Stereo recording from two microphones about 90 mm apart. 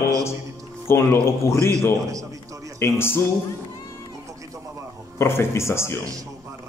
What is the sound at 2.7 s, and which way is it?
Speech, 25° left (ahead or behind).